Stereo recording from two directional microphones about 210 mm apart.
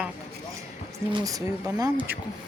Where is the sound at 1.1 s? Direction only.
15° right (ahead or behind).